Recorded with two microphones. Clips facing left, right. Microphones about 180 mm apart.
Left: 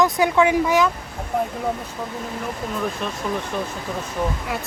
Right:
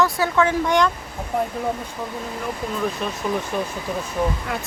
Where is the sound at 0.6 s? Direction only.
5° left (ahead or behind).